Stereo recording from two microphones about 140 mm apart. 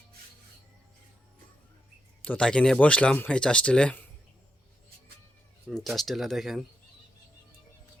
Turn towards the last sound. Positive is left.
turn(degrees=0)  # may be behind; listen again after turning